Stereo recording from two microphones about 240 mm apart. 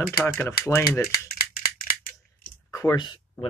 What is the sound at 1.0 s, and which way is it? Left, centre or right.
Rattle, left.